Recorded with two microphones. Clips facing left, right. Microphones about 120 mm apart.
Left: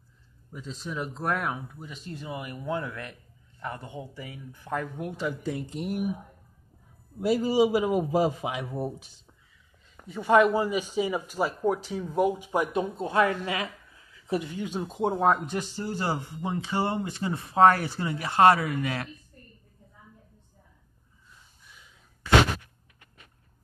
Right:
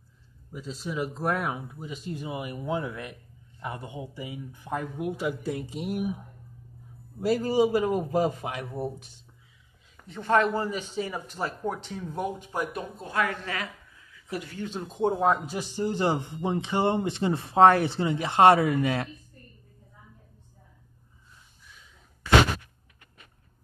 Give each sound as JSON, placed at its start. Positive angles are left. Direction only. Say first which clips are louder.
{"t": 0.5, "sound": "speech", "louder": "right 2 dB", "side_deg": -5}
{"t": 7.2, "sound": "a man's voice", "louder": "left 1 dB", "side_deg": 5}
{"t": 10.0, "sound": "speech", "louder": "left 3 dB", "side_deg": 10}
{"t": 12.4, "sound": "speech", "louder": "left 5 dB", "side_deg": 20}
{"t": 15.7, "sound": "speech", "louder": "right 8 dB", "side_deg": -20}